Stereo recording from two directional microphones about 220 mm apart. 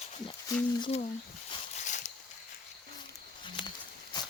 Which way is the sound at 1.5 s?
30° left (ahead or behind).